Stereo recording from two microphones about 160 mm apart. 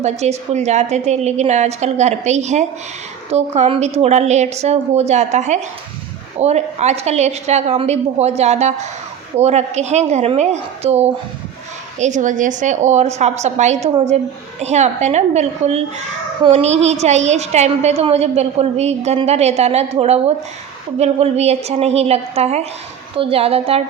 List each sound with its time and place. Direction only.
0.0 s a woman's voice: 45° right (ahead or behind)